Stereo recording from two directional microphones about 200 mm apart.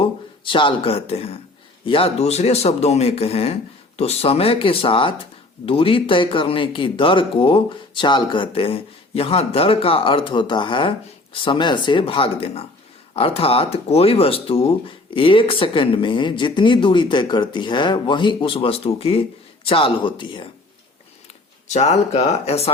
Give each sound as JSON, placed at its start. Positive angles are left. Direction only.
{"t": 0.0, "sound": "speech", "side_deg": 25}
{"t": 21.7, "sound": "speech", "side_deg": 35}